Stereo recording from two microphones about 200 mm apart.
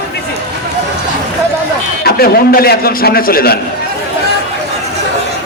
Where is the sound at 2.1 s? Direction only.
50° left (ahead or behind).